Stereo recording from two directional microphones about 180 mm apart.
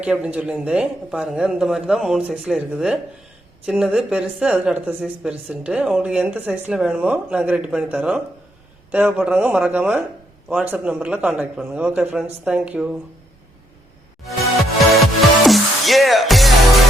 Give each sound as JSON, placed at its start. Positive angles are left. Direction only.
{"t": 0.0, "sound": "speech", "side_deg": -5}
{"t": 14.9, "sound": "music", "side_deg": 0}